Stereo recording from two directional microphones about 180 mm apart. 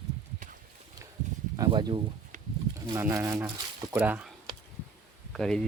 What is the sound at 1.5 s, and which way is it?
Speech, 25° right (ahead or behind).